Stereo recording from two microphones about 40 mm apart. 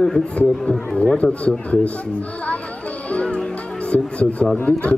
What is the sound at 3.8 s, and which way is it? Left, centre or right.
Speech, left.